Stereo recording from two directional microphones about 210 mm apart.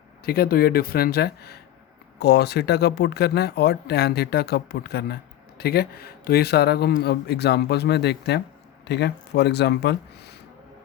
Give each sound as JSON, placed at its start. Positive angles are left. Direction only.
{"t": 0.3, "sound": "speech", "side_deg": 45}